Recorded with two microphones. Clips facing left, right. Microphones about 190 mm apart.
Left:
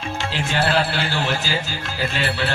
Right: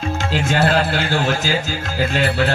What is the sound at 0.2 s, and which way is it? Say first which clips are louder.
A man's voice: right 4 dB; 45° right (ahead or behind).